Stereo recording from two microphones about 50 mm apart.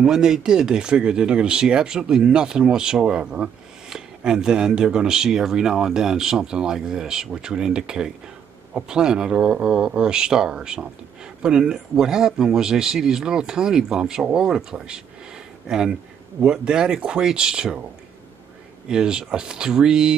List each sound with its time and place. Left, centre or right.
0.0 s speech: centre
18.9 s speech: centre